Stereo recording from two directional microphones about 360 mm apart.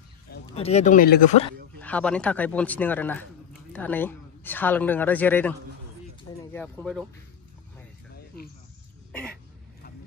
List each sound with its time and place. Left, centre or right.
0.5 s speech: centre
1.8 s a woman's voice: centre
9.1 s a sound: centre